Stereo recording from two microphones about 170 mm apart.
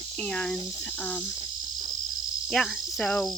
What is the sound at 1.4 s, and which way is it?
Cricket, 55° left (ahead or behind).